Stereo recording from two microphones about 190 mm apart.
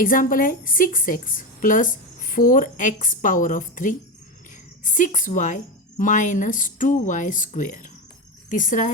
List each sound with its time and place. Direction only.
0.0 s a woman's voice: 45° left (ahead or behind)